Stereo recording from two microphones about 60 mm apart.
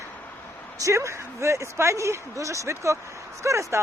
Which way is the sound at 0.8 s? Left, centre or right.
Right.